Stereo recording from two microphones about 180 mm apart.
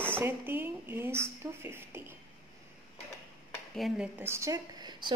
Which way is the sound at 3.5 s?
Centre (ahead or behind).